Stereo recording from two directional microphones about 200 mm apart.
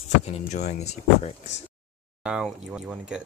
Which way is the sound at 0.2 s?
35° left (ahead or behind).